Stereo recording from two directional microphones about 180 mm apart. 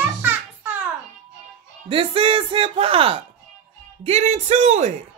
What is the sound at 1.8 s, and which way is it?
A child's voice, 30° right (ahead or behind).